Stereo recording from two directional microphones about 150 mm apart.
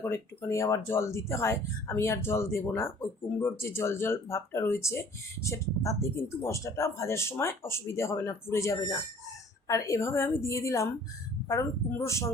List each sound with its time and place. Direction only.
0.0 s speech: 20° left (ahead or behind)